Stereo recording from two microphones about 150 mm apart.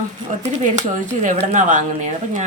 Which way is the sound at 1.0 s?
55° right (ahead or behind).